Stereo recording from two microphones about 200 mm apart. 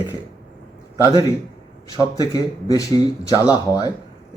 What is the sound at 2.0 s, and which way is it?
Speech, 20° left (ahead or behind).